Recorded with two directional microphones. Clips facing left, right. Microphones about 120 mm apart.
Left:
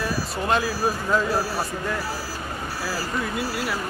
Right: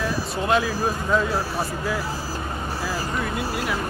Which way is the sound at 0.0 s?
Centre (ahead or behind).